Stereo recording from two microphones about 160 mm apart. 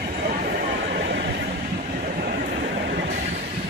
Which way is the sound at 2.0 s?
55° right (ahead or behind).